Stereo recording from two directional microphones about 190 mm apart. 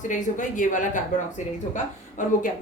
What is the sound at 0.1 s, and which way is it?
A woman's voice, 40° left (ahead or behind).